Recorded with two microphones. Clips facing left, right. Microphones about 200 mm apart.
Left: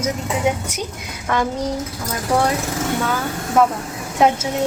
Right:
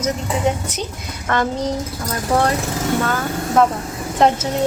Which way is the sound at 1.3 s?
10° left (ahead or behind).